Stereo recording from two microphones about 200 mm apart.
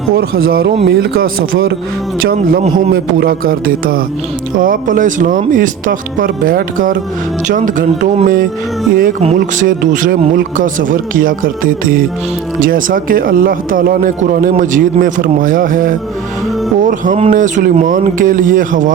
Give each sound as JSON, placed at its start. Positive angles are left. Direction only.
{"t": 0.1, "sound": "a man's voice", "side_deg": -50}